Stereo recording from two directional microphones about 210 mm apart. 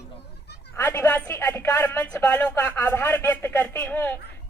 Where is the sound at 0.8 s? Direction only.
15° left (ahead or behind).